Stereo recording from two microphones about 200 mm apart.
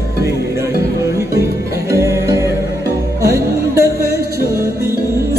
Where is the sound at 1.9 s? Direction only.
15° right (ahead or behind).